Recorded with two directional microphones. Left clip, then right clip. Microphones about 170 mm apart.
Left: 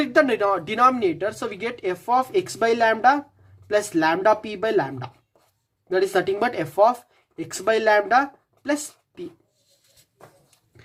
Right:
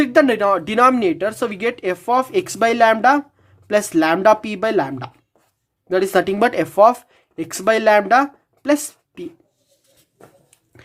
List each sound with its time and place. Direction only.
0.0 s speech: 30° right (ahead or behind)